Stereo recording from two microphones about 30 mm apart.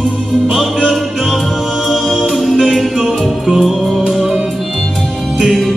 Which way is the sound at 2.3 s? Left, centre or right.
Centre.